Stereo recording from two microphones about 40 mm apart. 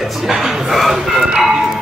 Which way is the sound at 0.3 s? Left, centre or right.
Centre.